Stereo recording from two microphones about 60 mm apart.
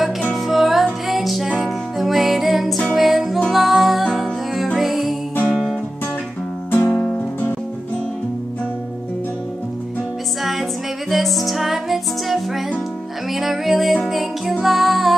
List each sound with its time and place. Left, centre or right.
0.0 s music: centre
6.7 s music: left
11.1 s music: centre